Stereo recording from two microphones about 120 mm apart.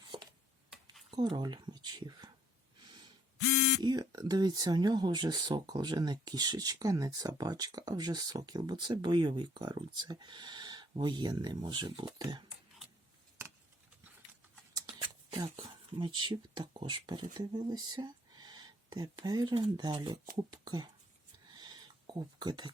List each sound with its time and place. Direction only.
1.1 s speech: 40° right (ahead or behind)
3.8 s speech: 35° right (ahead or behind)
15.5 s speech: 40° right (ahead or behind)
21.5 s a sound: 35° right (ahead or behind)